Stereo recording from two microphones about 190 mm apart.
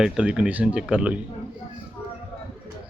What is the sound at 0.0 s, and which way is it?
A man's voice, 5° right (ahead or behind).